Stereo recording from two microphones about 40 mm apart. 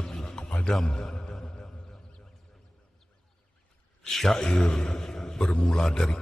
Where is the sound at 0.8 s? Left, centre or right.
Left.